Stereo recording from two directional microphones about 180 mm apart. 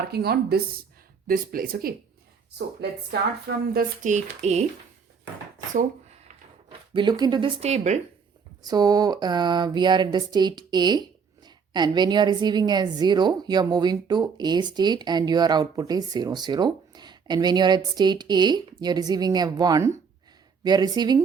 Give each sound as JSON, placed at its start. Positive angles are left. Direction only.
{"t": 0.1, "sound": "speech", "side_deg": -60}
{"t": 2.6, "sound": "speech", "side_deg": -65}
{"t": 3.7, "sound": "speech", "side_deg": -55}
{"t": 4.1, "sound": "speech", "side_deg": -40}
{"t": 6.9, "sound": "a woman's voice", "side_deg": -25}
{"t": 7.6, "sound": "speech", "side_deg": -40}
{"t": 8.6, "sound": "a woman's voice", "side_deg": -20}